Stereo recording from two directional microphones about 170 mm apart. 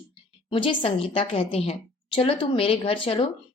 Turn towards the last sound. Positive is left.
turn(degrees=30)  # may be behind; listen again after turning